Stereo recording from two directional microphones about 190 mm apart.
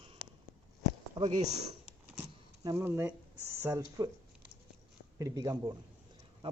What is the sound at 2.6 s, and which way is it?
Speech, 15° right (ahead or behind).